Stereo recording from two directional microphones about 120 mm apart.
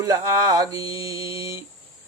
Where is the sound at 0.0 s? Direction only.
30° right (ahead or behind).